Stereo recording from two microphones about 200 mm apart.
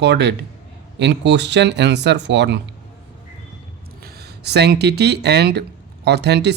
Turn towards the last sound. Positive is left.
turn(degrees=-55)  # may be behind; listen again after turning